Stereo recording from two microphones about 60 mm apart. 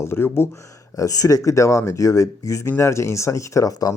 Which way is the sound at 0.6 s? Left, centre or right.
Left.